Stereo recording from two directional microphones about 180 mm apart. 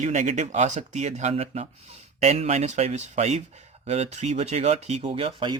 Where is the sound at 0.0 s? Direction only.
40° right (ahead or behind).